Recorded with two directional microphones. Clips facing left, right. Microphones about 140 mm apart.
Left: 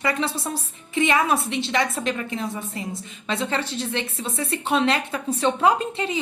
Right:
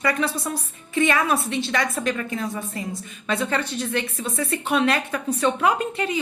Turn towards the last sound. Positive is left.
turn(degrees=30)  # may be behind; listen again after turning